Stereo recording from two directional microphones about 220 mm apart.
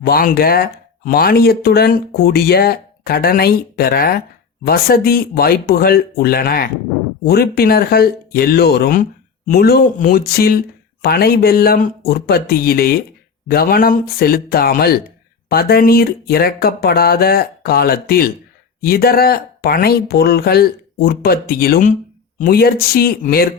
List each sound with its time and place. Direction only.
0.0 s speech: 45° left (ahead or behind)